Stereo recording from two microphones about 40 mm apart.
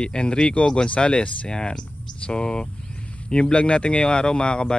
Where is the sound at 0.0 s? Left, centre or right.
Left.